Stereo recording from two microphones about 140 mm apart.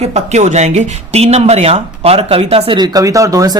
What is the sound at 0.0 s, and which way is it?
Speech, 55° right (ahead or behind).